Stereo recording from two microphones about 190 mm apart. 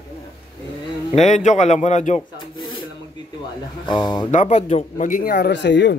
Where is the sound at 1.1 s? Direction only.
35° left (ahead or behind).